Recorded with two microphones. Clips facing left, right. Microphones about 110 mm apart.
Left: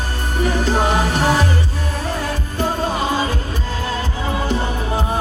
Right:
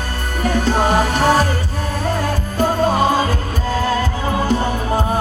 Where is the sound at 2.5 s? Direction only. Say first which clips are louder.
Right 5 dB; 45° right (ahead or behind).